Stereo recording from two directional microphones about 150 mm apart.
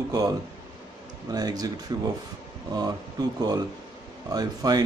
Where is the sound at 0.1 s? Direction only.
25° right (ahead or behind).